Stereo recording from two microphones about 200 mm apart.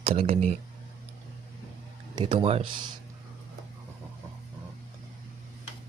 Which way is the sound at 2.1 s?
20° right (ahead or behind).